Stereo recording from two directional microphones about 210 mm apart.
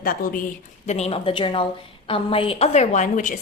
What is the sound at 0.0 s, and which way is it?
Speech, 40° left (ahead or behind).